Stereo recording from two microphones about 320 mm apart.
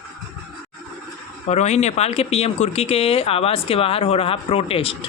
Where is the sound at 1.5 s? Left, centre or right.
Left.